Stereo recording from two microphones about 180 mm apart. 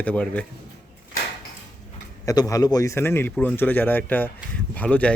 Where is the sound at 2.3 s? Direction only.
20° left (ahead or behind).